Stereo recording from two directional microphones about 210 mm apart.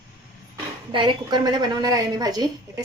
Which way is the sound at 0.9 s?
20° right (ahead or behind).